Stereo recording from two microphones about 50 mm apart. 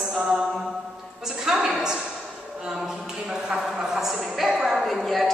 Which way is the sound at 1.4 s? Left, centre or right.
Centre.